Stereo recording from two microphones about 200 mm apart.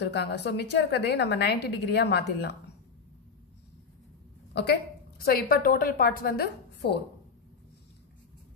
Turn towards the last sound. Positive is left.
turn(degrees=50)  # may be behind; listen again after turning